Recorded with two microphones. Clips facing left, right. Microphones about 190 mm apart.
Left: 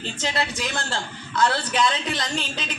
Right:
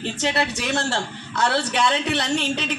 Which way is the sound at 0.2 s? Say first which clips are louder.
Right 2 dB; 70° right (ahead or behind).